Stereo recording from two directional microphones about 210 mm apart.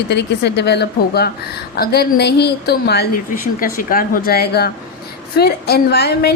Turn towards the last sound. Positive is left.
turn(degrees=50)  # may be behind; listen again after turning